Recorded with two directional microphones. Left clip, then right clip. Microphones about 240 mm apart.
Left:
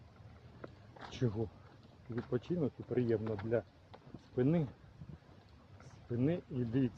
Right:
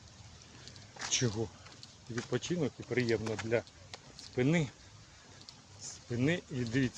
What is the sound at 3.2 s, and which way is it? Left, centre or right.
Speech, centre.